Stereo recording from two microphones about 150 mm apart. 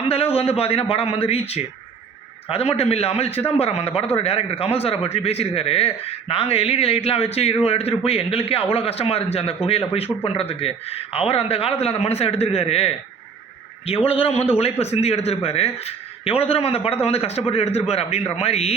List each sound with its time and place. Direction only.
0.1 s a man's voice: 40° left (ahead or behind)